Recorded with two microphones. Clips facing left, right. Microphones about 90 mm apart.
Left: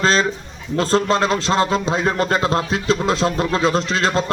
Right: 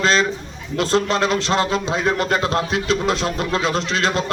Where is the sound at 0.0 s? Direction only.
30° left (ahead or behind).